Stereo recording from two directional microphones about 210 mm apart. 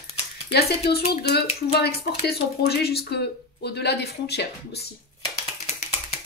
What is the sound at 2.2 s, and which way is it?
A woman's voice, 50° left (ahead or behind).